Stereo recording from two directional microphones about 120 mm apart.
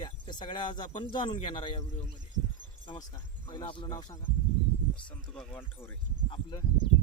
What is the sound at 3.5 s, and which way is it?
Speech, 40° left (ahead or behind).